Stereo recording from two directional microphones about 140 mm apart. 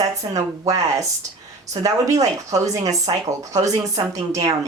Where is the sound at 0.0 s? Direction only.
25° right (ahead or behind).